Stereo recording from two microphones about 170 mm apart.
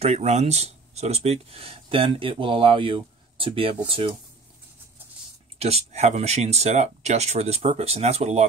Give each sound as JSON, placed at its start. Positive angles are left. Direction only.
{"t": 0.0, "sound": "speech", "side_deg": -40}
{"t": 5.6, "sound": "speech", "side_deg": -40}